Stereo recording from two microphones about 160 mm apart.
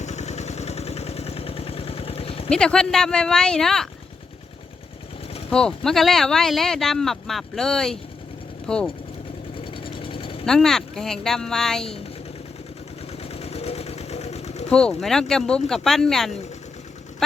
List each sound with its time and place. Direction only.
0.0 s vehicle: 45° left (ahead or behind)
2.5 s speech: 5° left (ahead or behind)
5.5 s speech: 5° left (ahead or behind)
9.6 s sewing machine: 35° left (ahead or behind)
10.4 s speech: 5° left (ahead or behind)
13.2 s sewing machine: 40° left (ahead or behind)
14.7 s speech: 5° left (ahead or behind)